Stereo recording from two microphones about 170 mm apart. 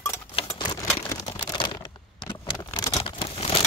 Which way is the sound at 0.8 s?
20° left (ahead or behind).